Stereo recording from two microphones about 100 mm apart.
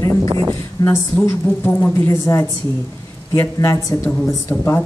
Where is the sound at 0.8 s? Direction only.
40° left (ahead or behind).